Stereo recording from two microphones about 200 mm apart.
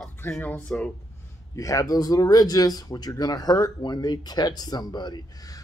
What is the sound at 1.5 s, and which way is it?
Speech, 15° left (ahead or behind).